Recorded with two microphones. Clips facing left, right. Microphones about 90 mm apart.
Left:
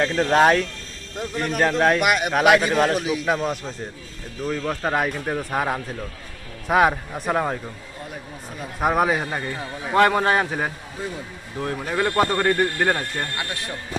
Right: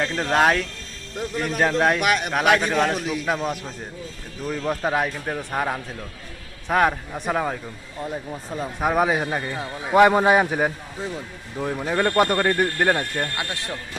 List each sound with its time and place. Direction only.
0.0 s a man's voice: centre (ahead or behind)
8.0 s speech: 25° right (ahead or behind)
8.8 s a man's voice: centre (ahead or behind)
9.6 s speech: 15° right (ahead or behind)
13.3 s speech: 20° right (ahead or behind)